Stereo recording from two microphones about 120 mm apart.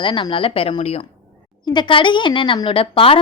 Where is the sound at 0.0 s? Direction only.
45° left (ahead or behind).